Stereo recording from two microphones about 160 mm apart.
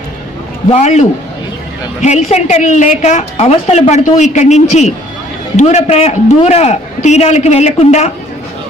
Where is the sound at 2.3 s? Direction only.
45° left (ahead or behind).